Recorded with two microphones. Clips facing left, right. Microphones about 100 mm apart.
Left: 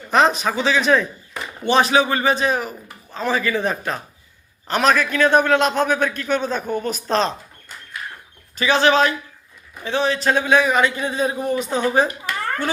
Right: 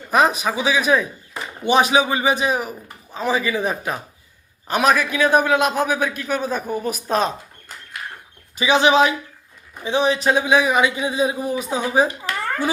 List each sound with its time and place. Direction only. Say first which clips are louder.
0.1 s a man's voice: left 1 dB; 10° right (ahead or behind)
8.5 s a man's voice: right 1 dB; 15° right (ahead or behind)